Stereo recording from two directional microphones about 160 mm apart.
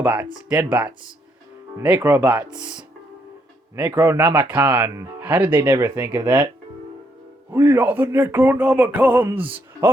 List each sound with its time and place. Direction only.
0.0 s speech: 10° right (ahead or behind); by 2.6 s 25° right (ahead or behind)
3.8 s speech: 10° right (ahead or behind)
7.5 s speech: 15° right (ahead or behind)